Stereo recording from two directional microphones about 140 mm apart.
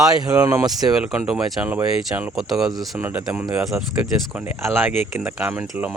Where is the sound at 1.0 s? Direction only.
5° right (ahead or behind).